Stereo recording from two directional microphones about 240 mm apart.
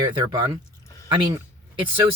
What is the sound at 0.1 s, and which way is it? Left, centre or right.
Speech, centre.